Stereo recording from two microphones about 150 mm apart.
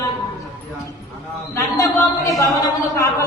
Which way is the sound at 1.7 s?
20° left (ahead or behind).